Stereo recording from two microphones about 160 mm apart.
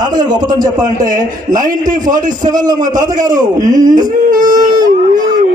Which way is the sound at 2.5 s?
25° right (ahead or behind).